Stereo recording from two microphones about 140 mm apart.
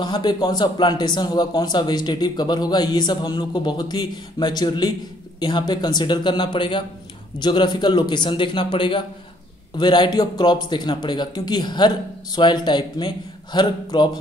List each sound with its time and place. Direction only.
0.0 s a man's voice: 30° left (ahead or behind)